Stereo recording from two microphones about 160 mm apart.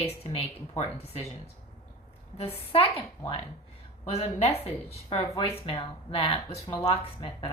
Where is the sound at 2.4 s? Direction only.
35° left (ahead or behind).